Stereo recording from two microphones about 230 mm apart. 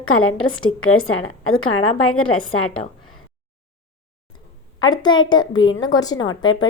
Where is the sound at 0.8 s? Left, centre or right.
Left.